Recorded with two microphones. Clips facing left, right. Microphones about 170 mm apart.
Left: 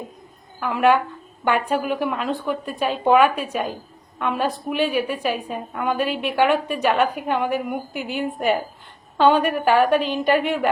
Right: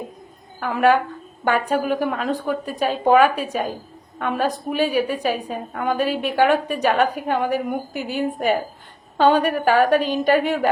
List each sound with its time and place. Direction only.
0.6 s a woman's voice: 40° right (ahead or behind)